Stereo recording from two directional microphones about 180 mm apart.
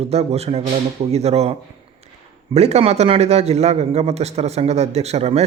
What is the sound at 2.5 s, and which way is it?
A man's voice, 35° right (ahead or behind).